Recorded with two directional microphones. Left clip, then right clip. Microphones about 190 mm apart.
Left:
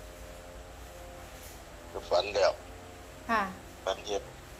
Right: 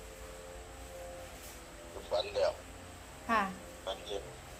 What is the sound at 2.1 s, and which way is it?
Speech, 60° left (ahead or behind).